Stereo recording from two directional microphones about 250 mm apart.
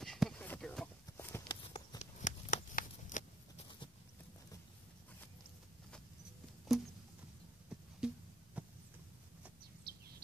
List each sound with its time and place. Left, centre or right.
0.0 s walk: centre
1.7 s shuffling cards: left
6.7 s a sound: centre
8.0 s a sound: centre
8.6 s heart sounds: centre
9.9 s bird: right